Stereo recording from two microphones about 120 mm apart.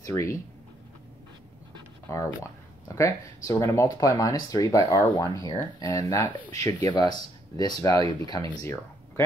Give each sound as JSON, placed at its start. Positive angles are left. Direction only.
{"t": 0.0, "sound": "speech", "side_deg": 25}
{"t": 2.9, "sound": "speech", "side_deg": 25}